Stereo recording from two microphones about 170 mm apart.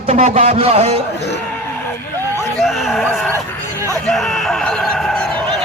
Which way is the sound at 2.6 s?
Centre (ahead or behind).